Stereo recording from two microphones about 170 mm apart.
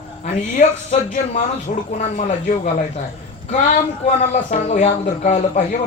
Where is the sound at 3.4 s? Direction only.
40° left (ahead or behind).